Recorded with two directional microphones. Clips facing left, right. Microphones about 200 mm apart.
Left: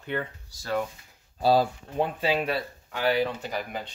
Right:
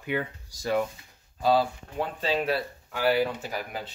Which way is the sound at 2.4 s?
Centre (ahead or behind).